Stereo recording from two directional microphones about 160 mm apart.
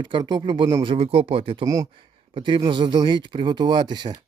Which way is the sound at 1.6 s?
20° right (ahead or behind).